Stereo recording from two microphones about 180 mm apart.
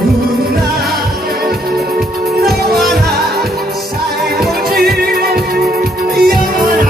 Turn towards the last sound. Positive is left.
turn(degrees=-55)  # may be behind; listen again after turning